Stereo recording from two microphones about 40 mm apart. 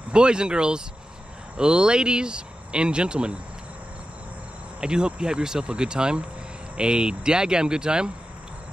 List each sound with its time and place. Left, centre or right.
0.1 s speech: right
4.7 s speech: right